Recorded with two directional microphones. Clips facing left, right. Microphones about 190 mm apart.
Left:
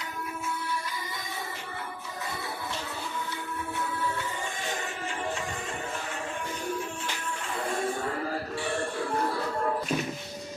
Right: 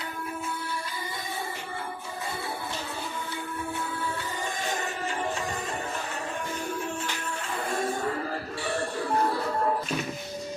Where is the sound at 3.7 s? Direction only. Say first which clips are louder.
Left 4 dB; 30° right (ahead or behind).